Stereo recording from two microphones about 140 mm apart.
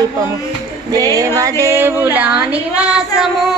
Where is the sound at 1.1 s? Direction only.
25° right (ahead or behind); by 3.3 s 5° right (ahead or behind).